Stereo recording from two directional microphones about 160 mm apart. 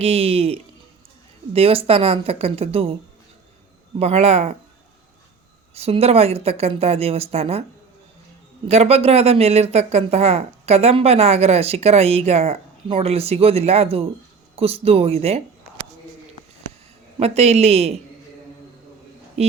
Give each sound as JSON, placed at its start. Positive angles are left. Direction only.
{"t": 0.0, "sound": "speech", "side_deg": -40}
{"t": 3.9, "sound": "speech", "side_deg": -40}
{"t": 5.7, "sound": "speech", "side_deg": -40}
{"t": 8.6, "sound": "speech", "side_deg": -40}
{"t": 17.2, "sound": "speech", "side_deg": -40}